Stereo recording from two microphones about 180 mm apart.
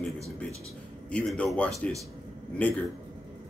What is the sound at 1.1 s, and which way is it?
Speech, 5° left (ahead or behind).